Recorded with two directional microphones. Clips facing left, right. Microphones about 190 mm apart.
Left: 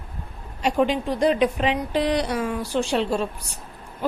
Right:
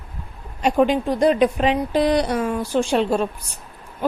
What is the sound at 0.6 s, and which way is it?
A woman's voice, 50° right (ahead or behind).